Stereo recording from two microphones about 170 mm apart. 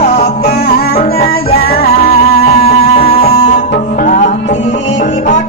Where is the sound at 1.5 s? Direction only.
60° left (ahead or behind).